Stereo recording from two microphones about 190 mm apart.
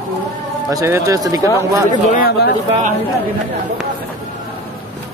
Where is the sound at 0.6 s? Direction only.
15° right (ahead or behind).